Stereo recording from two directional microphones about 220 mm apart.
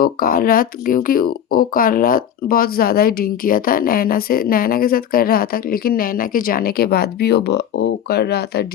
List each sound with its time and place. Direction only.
0.0 s speech: 40° left (ahead or behind)